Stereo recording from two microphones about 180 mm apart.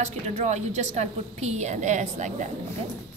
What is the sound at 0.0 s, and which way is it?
A woman's voice, 40° right (ahead or behind).